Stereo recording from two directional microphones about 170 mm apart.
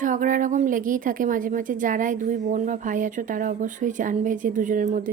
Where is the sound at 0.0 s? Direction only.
50° right (ahead or behind).